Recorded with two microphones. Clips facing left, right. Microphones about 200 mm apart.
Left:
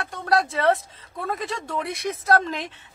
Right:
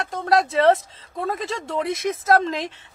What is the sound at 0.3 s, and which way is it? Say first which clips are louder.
Speech: right 4 dB; 25° right (ahead or behind).